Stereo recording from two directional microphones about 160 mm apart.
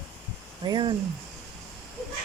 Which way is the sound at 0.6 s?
30° right (ahead or behind).